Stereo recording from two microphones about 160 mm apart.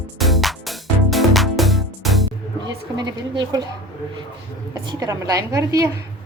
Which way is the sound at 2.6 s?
25° right (ahead or behind).